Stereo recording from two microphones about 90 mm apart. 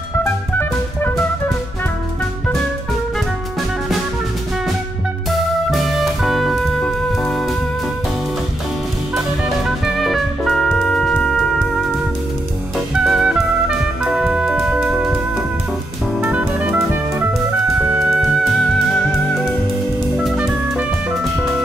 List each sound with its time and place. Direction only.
5.7 s music: centre (ahead or behind)
9.8 s music: centre (ahead or behind)
12.7 s music: 5° right (ahead or behind)
16.2 s music: 15° right (ahead or behind)
17.8 s music: 10° right (ahead or behind)
20.2 s music: 10° right (ahead or behind)